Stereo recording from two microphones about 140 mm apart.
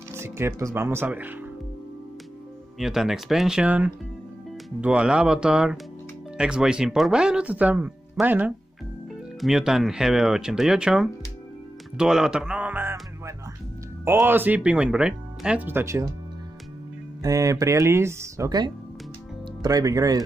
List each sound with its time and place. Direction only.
0.1 s speech: 20° right (ahead or behind)
2.8 s a man's voice: centre (ahead or behind)
14.0 s speech: 15° right (ahead or behind)
17.2 s speech: 25° right (ahead or behind)